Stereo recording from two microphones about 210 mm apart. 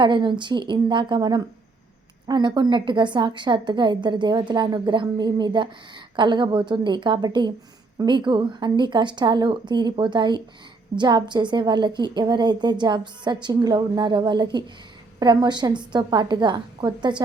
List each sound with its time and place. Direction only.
0.0 s a woman's voice: 20° right (ahead or behind)